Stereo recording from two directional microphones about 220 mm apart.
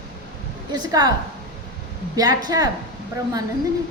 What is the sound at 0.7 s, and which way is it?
Speech, 20° right (ahead or behind).